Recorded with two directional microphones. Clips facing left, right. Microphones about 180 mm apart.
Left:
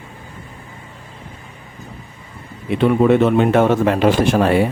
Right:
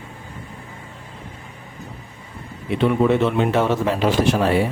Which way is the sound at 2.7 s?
55° left (ahead or behind).